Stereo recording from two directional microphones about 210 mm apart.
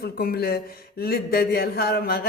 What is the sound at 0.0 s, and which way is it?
A woman's voice, 45° left (ahead or behind).